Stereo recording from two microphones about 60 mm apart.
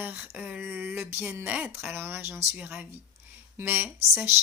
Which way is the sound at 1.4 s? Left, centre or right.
Right.